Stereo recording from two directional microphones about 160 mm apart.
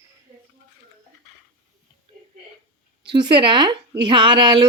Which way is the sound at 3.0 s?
30° right (ahead or behind).